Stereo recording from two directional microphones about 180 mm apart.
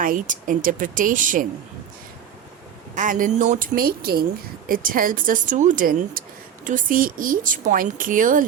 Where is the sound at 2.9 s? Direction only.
45° right (ahead or behind).